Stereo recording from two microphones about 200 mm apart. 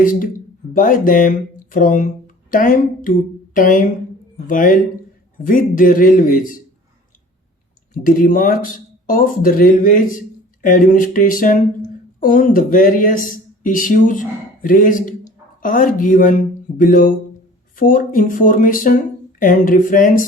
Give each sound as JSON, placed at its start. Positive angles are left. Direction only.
{"t": 0.0, "sound": "speech", "side_deg": 40}
{"t": 7.9, "sound": "speech", "side_deg": 45}